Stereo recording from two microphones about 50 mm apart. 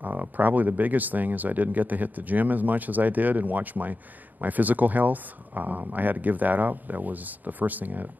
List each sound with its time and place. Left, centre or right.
0.0 s speech: right